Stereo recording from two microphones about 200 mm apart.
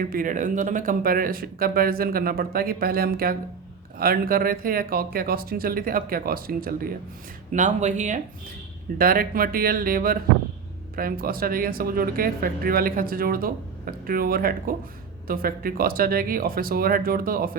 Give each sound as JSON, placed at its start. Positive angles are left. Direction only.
{"t": 0.0, "sound": "speech", "side_deg": -45}